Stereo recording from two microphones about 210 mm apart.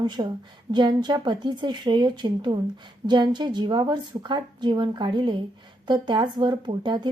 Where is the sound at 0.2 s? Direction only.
20° right (ahead or behind).